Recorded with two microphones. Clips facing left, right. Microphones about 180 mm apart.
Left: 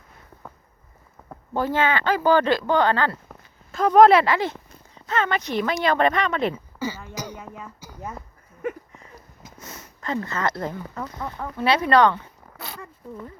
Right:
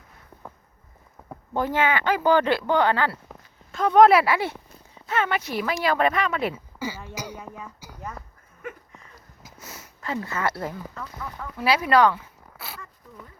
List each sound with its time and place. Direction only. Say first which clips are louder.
1.3 s speech: left 1 dB; 15° right (ahead or behind)
3.7 s speech: left 2 dB; centre (ahead or behind)
7.6 s a sound: left 1 dB; 10° right (ahead or behind)
9.4 s a sound: left 1 dB; centre (ahead or behind)
10.9 s speech: left 4 dB; 35° left (ahead or behind)
11.5 s speech: left 1 dB; 5° right (ahead or behind)